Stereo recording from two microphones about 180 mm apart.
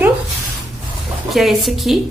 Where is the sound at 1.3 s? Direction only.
Centre (ahead or behind).